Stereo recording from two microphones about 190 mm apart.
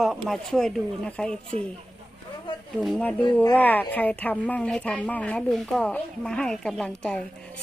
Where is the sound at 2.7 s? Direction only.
5° left (ahead or behind).